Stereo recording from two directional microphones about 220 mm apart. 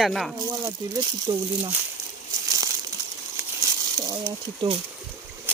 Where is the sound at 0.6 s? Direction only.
20° right (ahead or behind).